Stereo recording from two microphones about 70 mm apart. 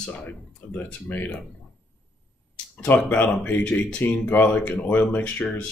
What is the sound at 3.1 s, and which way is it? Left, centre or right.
Speech, left.